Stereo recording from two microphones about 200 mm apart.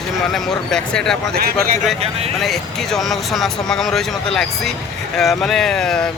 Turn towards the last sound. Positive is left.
turn(degrees=5)  # may be behind; listen again after turning